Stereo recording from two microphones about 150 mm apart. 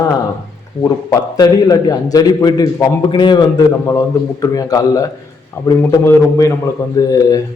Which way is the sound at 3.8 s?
20° left (ahead or behind).